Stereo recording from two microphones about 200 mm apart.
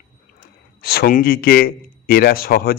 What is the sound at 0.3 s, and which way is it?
A man's voice, 50° left (ahead or behind).